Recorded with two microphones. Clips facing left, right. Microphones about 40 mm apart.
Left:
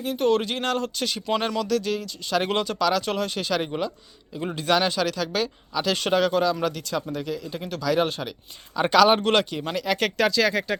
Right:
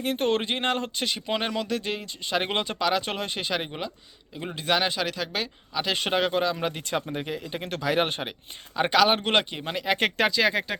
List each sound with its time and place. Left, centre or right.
0.0 s speech: right
7.1 s speech: right
8.9 s speech: centre